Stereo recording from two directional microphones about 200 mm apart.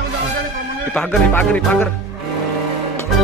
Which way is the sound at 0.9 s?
5° left (ahead or behind).